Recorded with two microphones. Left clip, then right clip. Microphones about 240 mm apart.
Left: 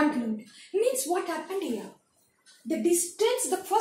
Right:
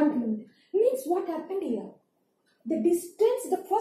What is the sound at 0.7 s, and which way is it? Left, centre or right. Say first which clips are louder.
Speech: right 2 dB; left.